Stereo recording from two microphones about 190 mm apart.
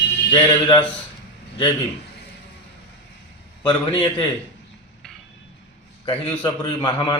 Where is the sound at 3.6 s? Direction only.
25° left (ahead or behind).